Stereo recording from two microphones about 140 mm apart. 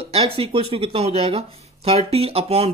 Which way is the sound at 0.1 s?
45° right (ahead or behind).